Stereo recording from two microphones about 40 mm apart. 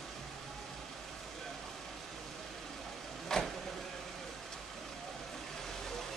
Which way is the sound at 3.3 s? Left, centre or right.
Centre.